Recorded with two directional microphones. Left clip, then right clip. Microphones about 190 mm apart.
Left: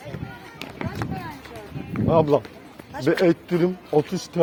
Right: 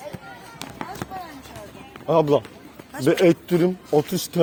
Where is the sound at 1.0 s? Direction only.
15° right (ahead or behind).